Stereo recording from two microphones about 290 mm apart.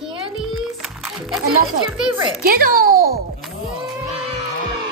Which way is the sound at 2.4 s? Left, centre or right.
Right.